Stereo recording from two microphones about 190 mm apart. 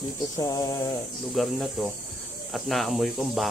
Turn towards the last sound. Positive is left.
turn(degrees=0)  # may be behind; listen again after turning